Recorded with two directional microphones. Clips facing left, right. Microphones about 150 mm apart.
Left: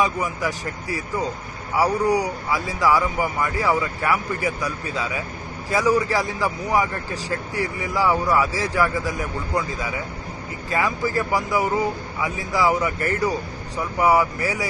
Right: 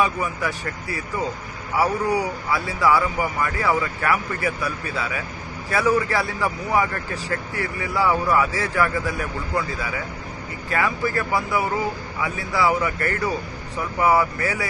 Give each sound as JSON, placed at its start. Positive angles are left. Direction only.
{"t": 0.2, "sound": "a man's voice", "side_deg": 15}